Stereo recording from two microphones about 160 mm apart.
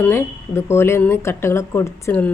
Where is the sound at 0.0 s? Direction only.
15° left (ahead or behind).